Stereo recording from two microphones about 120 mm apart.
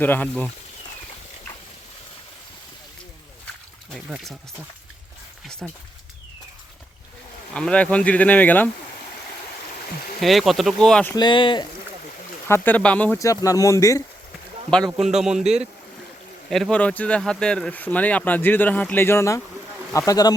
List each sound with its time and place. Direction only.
0.0 s speech: 15° left (ahead or behind)
5.6 s speech: centre (ahead or behind)
7.5 s speech: 10° left (ahead or behind)
10.2 s speech: centre (ahead or behind)
11.1 s speech: 40° left (ahead or behind)
12.5 s speech: 15° left (ahead or behind)
13.1 s speech: 25° left (ahead or behind)
14.9 s speech: centre (ahead or behind); by 20.3 s 30° left (ahead or behind)